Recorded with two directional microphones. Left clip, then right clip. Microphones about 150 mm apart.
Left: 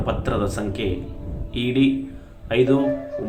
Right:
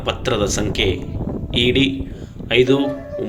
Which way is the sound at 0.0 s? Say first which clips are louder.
Right 4 dB; 10° right (ahead or behind).